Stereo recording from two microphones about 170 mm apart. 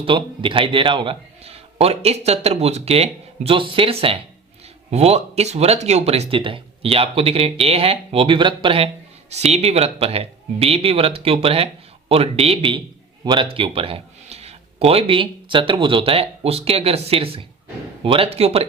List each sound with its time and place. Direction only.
0.0 s a man's voice: 30° right (ahead or behind)